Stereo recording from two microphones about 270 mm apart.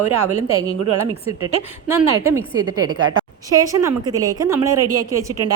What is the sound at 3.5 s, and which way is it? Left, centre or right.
A woman's voice, centre.